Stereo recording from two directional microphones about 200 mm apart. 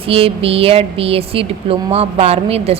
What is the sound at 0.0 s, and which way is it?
A woman's voice, 30° right (ahead or behind).